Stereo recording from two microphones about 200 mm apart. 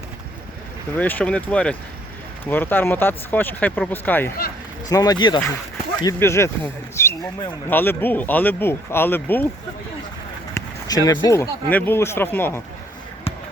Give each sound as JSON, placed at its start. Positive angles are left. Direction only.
{"t": 0.9, "sound": "speech", "side_deg": 10}
{"t": 6.9, "sound": "a sound", "side_deg": 15}
{"t": 7.7, "sound": "speech", "side_deg": 10}
{"t": 10.5, "sound": "speech", "side_deg": 20}